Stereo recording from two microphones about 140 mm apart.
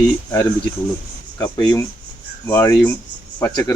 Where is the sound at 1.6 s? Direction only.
30° left (ahead or behind).